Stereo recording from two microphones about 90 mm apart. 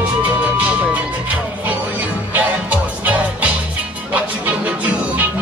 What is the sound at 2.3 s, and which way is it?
Music, 15° right (ahead or behind).